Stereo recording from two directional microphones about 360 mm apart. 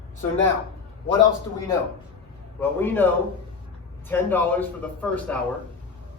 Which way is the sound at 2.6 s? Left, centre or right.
Centre.